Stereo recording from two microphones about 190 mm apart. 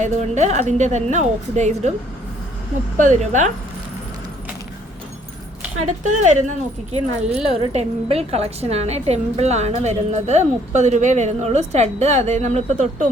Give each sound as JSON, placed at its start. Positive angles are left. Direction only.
{"t": 0.0, "sound": "a woman's voice", "side_deg": -40}
{"t": 3.0, "sound": "a woman's voice", "side_deg": -40}
{"t": 6.0, "sound": "a woman's voice", "side_deg": -40}